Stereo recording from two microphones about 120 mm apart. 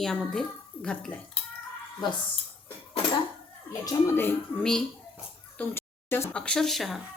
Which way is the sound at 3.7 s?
25° left (ahead or behind).